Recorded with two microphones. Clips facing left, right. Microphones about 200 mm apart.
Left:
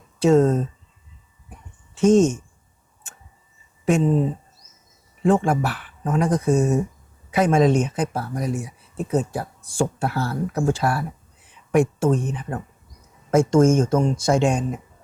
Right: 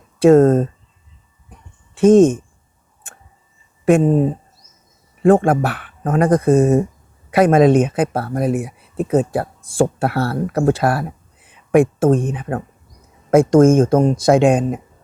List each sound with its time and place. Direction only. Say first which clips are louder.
0.2 s speech: right 6 dB; 55° right (ahead or behind)
2.0 s speech: right 6 dB; 55° right (ahead or behind)
3.8 s speech: right 6 dB; 50° right (ahead or behind)